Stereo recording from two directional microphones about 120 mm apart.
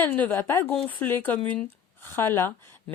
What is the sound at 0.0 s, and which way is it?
A woman's voice, 15° left (ahead or behind).